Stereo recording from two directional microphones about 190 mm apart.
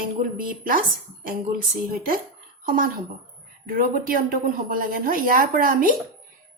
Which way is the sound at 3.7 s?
50° right (ahead or behind).